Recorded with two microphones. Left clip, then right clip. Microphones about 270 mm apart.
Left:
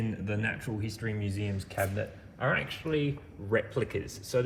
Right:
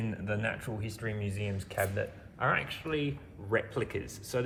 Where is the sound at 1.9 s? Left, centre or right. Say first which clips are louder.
Right 1 dB; right.